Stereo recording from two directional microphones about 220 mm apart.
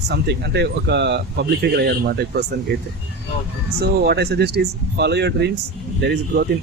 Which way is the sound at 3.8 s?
45° right (ahead or behind).